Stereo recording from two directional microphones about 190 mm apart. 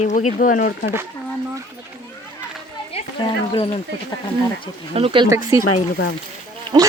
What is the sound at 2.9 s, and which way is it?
Speech, 25° left (ahead or behind).